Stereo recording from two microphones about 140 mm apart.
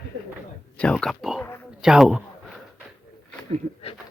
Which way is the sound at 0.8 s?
5° left (ahead or behind).